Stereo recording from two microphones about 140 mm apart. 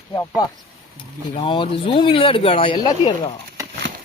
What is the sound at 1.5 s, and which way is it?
Speech, 35° left (ahead or behind).